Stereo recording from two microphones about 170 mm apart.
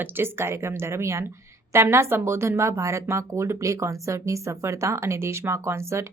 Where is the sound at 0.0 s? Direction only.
15° right (ahead or behind).